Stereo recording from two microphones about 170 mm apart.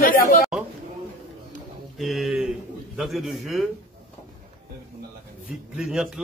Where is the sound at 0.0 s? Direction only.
55° left (ahead or behind).